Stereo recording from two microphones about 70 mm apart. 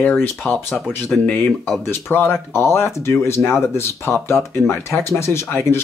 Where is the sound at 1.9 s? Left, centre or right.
Left.